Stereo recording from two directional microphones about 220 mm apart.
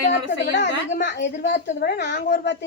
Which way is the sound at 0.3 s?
50° left (ahead or behind).